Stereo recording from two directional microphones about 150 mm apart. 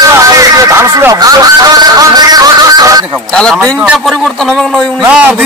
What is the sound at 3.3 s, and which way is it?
A man's voice, 5° left (ahead or behind).